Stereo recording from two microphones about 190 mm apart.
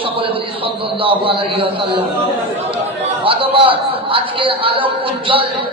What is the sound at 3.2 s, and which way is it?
A man's voice, 30° right (ahead or behind).